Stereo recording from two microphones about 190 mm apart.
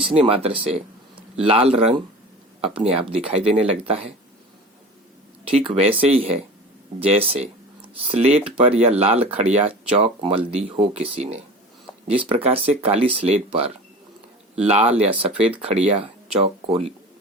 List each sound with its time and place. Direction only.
0.0 s speech: 30° right (ahead or behind)
5.5 s speech: 30° right (ahead or behind)